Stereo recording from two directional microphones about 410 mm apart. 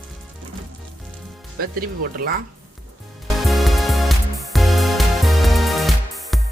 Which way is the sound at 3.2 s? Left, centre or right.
Centre.